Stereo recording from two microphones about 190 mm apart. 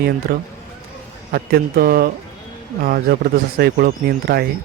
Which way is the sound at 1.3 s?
55° right (ahead or behind).